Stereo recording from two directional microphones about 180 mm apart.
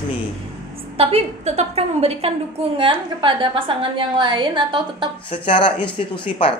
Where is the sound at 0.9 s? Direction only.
35° right (ahead or behind).